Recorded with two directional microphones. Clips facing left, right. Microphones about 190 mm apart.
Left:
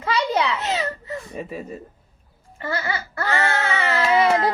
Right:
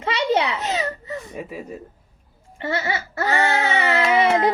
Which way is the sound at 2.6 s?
25° right (ahead or behind).